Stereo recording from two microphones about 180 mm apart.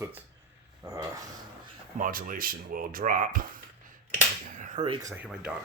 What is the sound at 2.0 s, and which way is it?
Speech, 50° right (ahead or behind).